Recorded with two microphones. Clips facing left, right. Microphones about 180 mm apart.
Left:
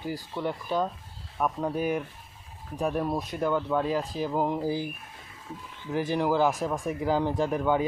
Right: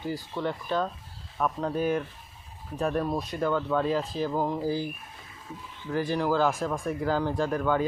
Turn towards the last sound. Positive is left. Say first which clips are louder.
# left 1 dB
turn(degrees=15)  # may be behind; listen again after turning